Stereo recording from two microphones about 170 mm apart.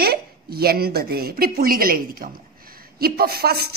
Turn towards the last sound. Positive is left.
turn(degrees=-70)  # may be behind; listen again after turning